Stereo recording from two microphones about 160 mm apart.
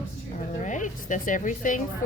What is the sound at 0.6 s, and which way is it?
A woman's voice, 50° left (ahead or behind).